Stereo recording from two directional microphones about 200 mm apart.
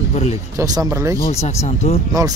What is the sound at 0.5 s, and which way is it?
Speech, 20° right (ahead or behind).